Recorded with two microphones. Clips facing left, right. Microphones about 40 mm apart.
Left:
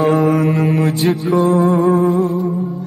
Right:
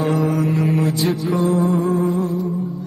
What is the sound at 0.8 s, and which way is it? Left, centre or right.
Mantra, left.